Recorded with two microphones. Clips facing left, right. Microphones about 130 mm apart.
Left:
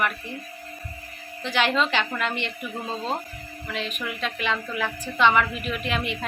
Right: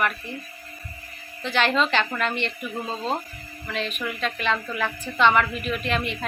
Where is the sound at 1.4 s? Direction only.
15° left (ahead or behind).